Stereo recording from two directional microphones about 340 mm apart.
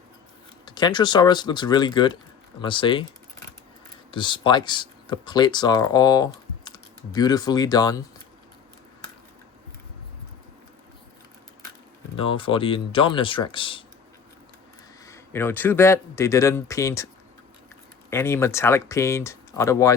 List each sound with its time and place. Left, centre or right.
0.6 s speech: centre
4.1 s speech: centre
12.1 s speech: centre
15.0 s speech: centre
18.1 s speech: centre